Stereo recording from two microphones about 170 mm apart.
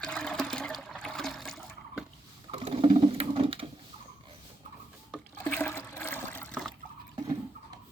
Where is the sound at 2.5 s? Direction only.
35° right (ahead or behind).